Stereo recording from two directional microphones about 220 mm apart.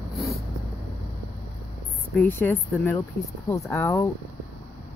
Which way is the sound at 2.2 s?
10° left (ahead or behind).